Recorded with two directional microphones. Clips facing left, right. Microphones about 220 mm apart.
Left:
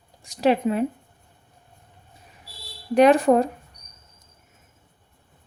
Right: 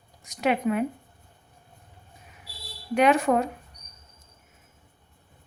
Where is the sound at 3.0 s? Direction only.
35° left (ahead or behind).